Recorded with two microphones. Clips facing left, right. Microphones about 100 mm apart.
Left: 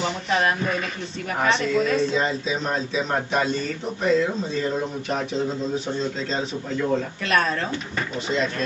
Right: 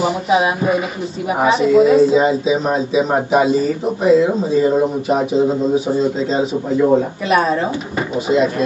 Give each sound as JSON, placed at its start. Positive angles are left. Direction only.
{"t": 0.0, "sound": "speech", "side_deg": -10}
{"t": 6.8, "sound": "speech", "side_deg": -20}
{"t": 7.2, "sound": "speech", "side_deg": -10}